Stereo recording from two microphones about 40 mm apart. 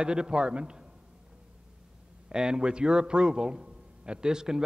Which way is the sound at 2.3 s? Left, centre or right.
Centre.